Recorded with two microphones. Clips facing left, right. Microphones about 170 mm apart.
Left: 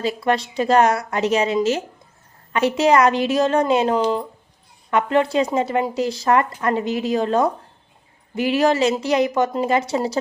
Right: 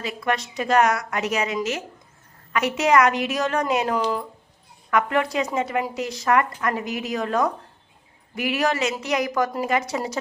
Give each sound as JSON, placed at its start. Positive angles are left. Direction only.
{"t": 0.0, "sound": "speech", "side_deg": 30}